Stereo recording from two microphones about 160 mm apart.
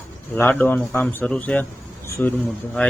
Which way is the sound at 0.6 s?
15° left (ahead or behind).